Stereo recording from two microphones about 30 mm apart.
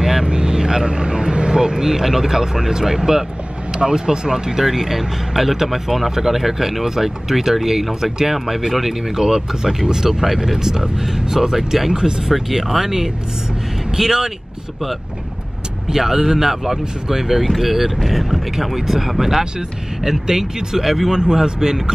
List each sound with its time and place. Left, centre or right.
0.2 s speech: right
4.6 s speech: centre
11.5 s speech: centre
11.9 s speech: right
12.3 s speech: centre
15.9 s speech: centre
21.1 s speech: right